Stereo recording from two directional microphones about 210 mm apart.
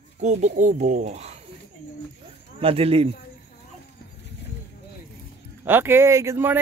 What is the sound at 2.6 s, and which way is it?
Speech, 25° right (ahead or behind).